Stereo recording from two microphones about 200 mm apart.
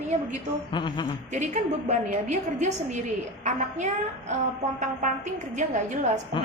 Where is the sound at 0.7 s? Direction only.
25° left (ahead or behind).